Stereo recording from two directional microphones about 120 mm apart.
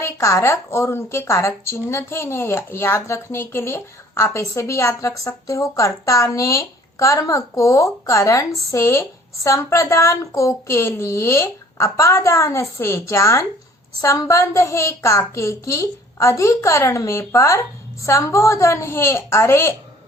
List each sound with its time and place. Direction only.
0.0 s speech: 25° left (ahead or behind)